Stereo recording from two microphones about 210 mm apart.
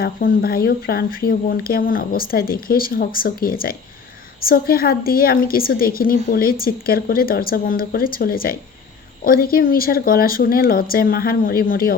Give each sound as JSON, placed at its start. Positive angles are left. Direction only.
{"t": 0.0, "sound": "speech", "side_deg": 45}